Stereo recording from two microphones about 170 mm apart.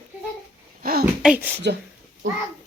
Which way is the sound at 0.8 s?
60° right (ahead or behind).